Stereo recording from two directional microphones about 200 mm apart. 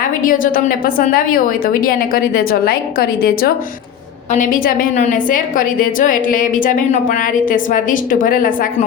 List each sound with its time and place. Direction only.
0.2 s a woman's voice: 45° left (ahead or behind)